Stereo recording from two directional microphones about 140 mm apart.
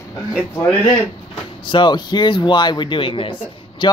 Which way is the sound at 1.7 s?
35° left (ahead or behind).